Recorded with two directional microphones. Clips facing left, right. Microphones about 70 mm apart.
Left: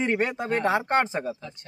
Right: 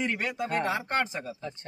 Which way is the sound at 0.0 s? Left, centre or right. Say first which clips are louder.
Left 5 dB; left.